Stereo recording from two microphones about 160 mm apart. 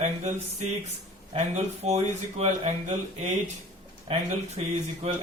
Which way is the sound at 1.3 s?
40° right (ahead or behind).